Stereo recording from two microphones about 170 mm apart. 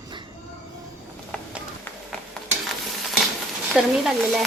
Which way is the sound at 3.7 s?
Centre (ahead or behind).